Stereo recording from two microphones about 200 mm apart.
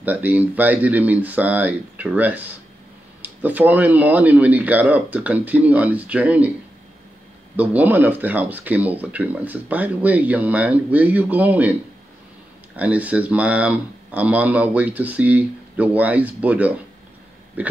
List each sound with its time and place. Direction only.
0.0 s speech: 10° right (ahead or behind)
7.5 s speech: 10° right (ahead or behind)
12.7 s speech: 5° right (ahead or behind)